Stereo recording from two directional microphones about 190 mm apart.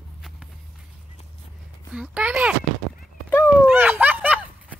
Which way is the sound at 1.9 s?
5° right (ahead or behind).